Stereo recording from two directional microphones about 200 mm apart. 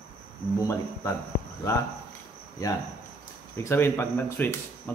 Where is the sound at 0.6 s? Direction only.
15° left (ahead or behind).